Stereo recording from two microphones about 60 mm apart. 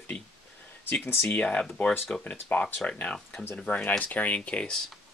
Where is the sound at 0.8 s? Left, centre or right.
Left.